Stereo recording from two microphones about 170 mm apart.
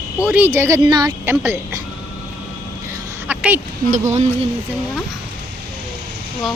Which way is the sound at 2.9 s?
15° right (ahead or behind).